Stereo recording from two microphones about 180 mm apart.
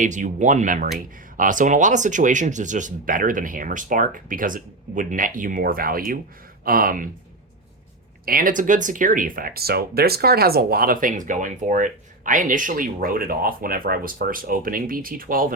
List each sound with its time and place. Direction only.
0.0 s speech: 45° right (ahead or behind)
8.2 s speech: 55° right (ahead or behind)